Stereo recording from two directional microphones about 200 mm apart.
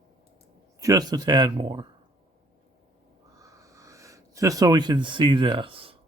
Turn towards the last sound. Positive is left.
turn(degrees=-25)  # may be behind; listen again after turning